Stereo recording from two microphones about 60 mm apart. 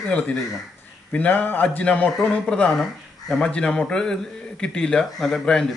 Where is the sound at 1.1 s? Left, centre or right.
Left.